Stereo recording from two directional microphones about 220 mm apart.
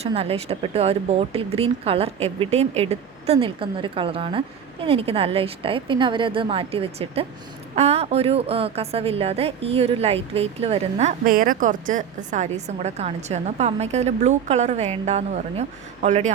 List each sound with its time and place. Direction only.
0.0 s a woman's voice: 25° right (ahead or behind)